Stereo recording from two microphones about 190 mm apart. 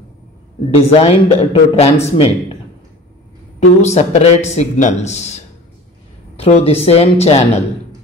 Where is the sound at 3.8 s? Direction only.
35° left (ahead or behind).